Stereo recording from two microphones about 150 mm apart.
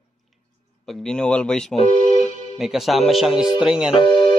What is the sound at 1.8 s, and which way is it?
Music, 50° left (ahead or behind).